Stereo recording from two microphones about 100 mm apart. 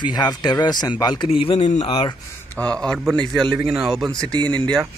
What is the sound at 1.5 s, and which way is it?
Speech, 65° left (ahead or behind).